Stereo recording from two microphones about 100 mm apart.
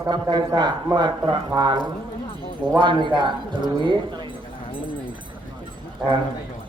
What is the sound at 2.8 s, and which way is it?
Speech, 50° right (ahead or behind).